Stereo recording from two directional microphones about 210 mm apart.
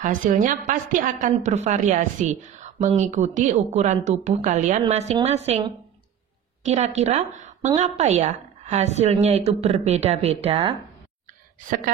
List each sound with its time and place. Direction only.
0.0 s a woman's voice: 35° right (ahead or behind)